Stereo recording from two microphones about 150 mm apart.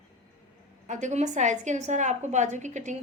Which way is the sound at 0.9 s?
55° right (ahead or behind).